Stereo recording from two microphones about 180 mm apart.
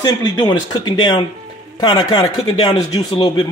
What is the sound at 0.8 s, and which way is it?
A man's voice, 25° left (ahead or behind).